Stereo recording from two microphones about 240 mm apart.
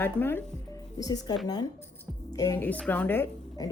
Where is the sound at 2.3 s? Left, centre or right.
Centre.